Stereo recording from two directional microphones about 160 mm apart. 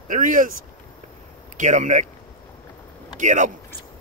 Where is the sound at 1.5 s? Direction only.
50° right (ahead or behind).